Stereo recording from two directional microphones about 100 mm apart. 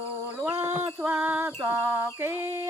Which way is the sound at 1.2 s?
20° right (ahead or behind).